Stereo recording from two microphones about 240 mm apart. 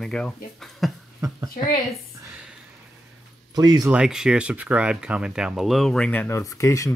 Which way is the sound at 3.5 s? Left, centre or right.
Centre.